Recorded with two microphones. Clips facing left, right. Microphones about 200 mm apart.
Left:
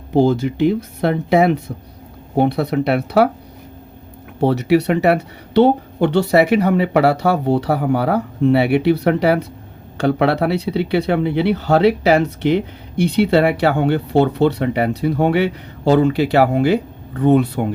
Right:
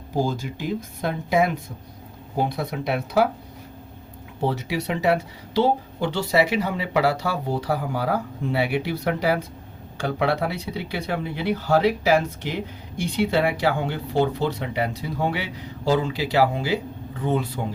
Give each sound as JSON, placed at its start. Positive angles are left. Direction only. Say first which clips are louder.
{"t": 0.1, "sound": "speech", "louder": "left 10 dB", "side_deg": 70}
{"t": 4.4, "sound": "speech", "louder": "left 11 dB", "side_deg": 65}